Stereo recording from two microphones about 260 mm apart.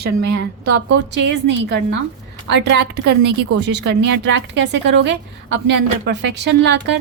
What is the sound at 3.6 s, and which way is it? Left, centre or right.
A woman's voice, right.